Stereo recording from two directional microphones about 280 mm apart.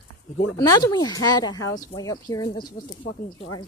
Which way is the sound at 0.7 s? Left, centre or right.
Centre.